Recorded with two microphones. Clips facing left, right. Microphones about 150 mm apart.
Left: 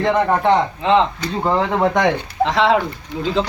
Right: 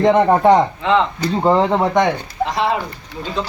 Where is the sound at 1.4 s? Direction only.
25° right (ahead or behind).